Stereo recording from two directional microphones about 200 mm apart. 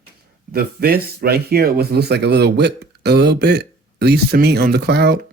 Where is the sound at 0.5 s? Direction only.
50° right (ahead or behind).